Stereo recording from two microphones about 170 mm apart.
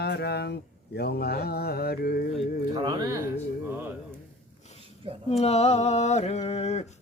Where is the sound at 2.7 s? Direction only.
25° right (ahead or behind).